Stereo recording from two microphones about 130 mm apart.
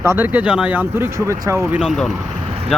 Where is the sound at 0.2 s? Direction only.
10° right (ahead or behind).